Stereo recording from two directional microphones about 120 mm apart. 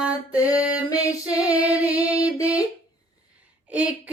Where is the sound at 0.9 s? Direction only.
30° left (ahead or behind).